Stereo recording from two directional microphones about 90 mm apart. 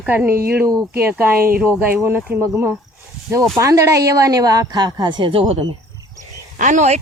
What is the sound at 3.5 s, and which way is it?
A woman's voice, 40° right (ahead or behind).